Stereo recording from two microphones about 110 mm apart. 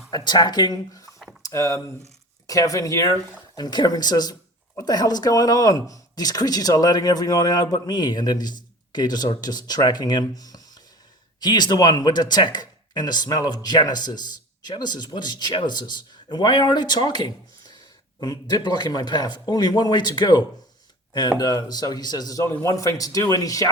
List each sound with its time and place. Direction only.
0.1 s speech: 40° left (ahead or behind)
1.4 s a sound: 30° left (ahead or behind)
2.5 s speech: 30° left (ahead or behind)